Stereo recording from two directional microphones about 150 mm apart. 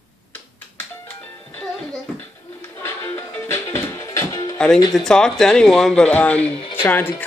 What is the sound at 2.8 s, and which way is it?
Music, 15° left (ahead or behind).